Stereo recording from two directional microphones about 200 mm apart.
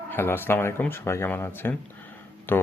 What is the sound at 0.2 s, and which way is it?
Speech, 10° left (ahead or behind).